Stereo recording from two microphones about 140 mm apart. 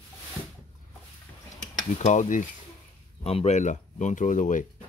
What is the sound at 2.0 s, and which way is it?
Speech, 60° left (ahead or behind).